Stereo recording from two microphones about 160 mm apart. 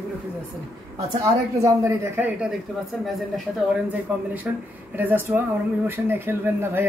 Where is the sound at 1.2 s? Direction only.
20° right (ahead or behind).